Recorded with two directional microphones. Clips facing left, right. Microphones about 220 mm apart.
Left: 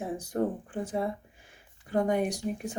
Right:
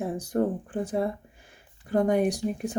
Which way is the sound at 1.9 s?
35° right (ahead or behind).